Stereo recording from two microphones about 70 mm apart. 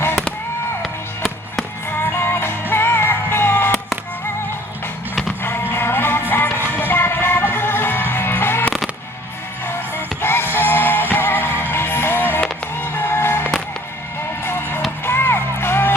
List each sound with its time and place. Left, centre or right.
1.9 s music: left
5.4 s music: left
9.6 s music: left